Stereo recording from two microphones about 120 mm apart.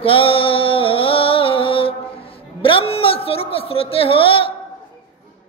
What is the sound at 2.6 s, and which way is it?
A woman's voice, 50° left (ahead or behind).